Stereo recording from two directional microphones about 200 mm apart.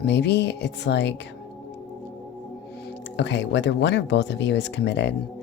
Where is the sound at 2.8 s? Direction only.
60° left (ahead or behind).